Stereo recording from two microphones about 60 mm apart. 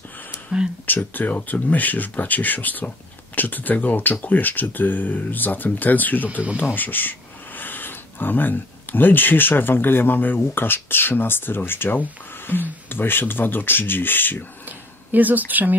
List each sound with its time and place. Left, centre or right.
0.5 s speech: centre
0.8 s speech: left
14.7 s a sound: right